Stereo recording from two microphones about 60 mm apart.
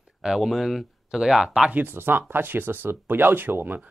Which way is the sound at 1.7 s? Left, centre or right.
Right.